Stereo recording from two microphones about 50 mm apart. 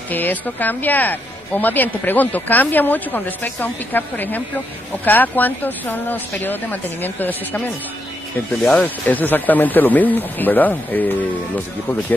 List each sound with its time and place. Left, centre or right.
0.1 s a woman's voice: left
8.7 s a woman's voice: left